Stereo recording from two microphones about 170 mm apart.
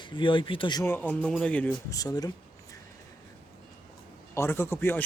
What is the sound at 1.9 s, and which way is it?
Speech, 20° left (ahead or behind).